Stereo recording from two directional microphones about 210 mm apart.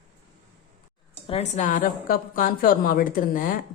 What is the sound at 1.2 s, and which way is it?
A woman's voice, 30° left (ahead or behind).